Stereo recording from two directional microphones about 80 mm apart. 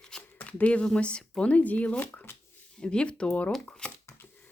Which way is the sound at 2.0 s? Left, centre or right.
Left.